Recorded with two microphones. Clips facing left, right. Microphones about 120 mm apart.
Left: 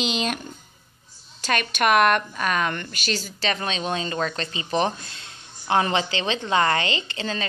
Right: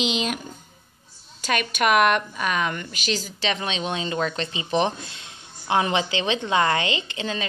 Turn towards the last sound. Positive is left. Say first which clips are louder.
# even
turn(degrees=-15)  # may be behind; listen again after turning